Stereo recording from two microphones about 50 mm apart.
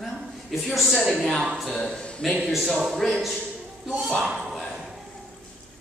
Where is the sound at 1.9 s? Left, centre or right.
Centre.